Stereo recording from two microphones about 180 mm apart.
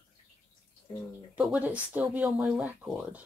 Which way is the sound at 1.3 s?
5° right (ahead or behind).